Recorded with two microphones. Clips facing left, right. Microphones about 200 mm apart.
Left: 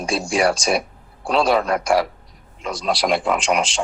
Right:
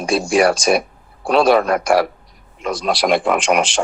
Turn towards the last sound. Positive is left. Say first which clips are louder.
# right 4 dB
turn(degrees=-75)  # may be behind; listen again after turning